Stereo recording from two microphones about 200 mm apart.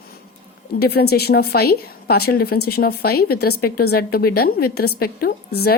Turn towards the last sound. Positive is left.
turn(degrees=50)  # may be behind; listen again after turning